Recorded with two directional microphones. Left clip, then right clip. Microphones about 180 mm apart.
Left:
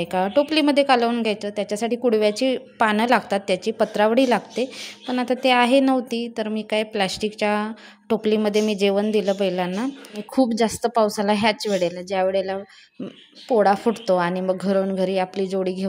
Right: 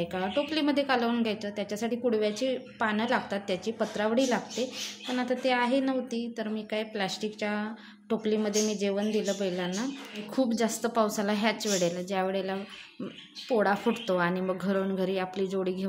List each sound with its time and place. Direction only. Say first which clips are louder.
0.0 s a woman's voice: left 10 dB; 45° left (ahead or behind)